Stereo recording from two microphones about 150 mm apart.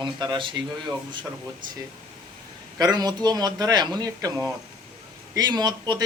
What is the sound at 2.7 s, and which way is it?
Speech, 25° right (ahead or behind).